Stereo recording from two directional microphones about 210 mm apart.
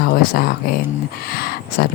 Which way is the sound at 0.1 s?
40° left (ahead or behind).